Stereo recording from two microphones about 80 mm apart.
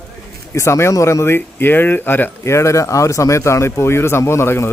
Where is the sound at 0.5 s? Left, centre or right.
Left.